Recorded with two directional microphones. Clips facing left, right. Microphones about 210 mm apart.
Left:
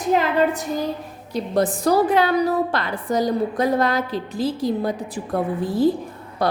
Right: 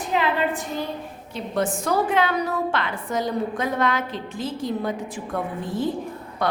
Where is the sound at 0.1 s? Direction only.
40° left (ahead or behind).